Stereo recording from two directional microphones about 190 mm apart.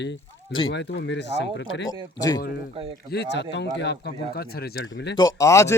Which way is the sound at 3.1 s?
65° left (ahead or behind).